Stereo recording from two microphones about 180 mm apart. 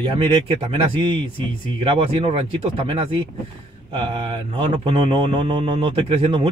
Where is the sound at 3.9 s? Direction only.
30° right (ahead or behind).